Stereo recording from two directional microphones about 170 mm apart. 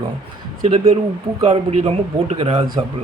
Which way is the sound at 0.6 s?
40° right (ahead or behind).